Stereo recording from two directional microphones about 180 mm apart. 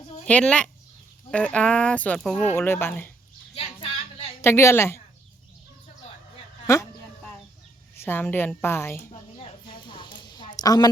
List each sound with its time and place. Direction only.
0.3 s speech: 5° left (ahead or behind)
3.5 s a sound: 30° left (ahead or behind)
4.4 s a woman's voice: 15° left (ahead or behind)
6.7 s speech: 15° left (ahead or behind)
7.9 s speech: 10° left (ahead or behind)
9.4 s a sound: 25° left (ahead or behind)